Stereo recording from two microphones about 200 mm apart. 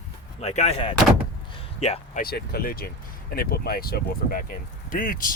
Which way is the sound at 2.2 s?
50° left (ahead or behind).